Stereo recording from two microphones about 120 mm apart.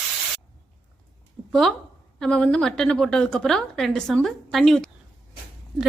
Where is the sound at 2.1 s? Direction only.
5° left (ahead or behind).